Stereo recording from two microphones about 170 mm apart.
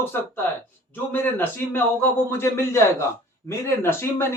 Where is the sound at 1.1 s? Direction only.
10° left (ahead or behind).